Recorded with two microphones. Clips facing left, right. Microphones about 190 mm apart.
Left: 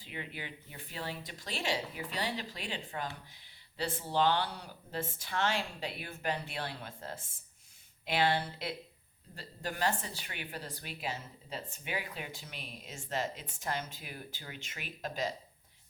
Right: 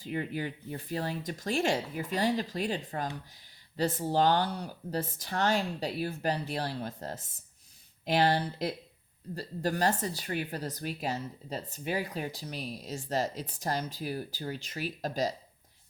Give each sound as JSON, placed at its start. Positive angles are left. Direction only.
{"t": 0.0, "sound": "speech", "side_deg": -45}